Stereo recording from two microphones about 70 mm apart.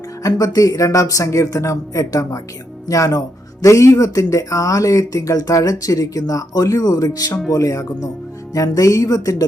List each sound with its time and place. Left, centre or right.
0.2 s speech: left
7.5 s speech: left